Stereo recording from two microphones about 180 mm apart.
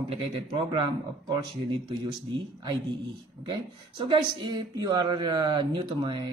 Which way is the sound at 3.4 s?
25° right (ahead or behind).